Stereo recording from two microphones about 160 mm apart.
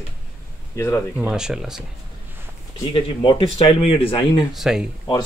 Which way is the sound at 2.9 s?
35° left (ahead or behind).